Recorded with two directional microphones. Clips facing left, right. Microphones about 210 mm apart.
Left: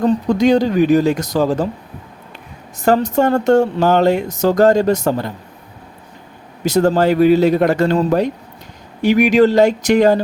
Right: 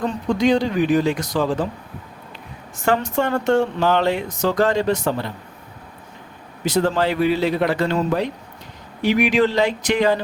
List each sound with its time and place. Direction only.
0.0 s speech: 40° left (ahead or behind)
2.7 s speech: 40° left (ahead or behind)
6.7 s speech: 45° left (ahead or behind)